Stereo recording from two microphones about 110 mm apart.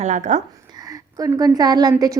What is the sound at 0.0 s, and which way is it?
Speech, 90° right.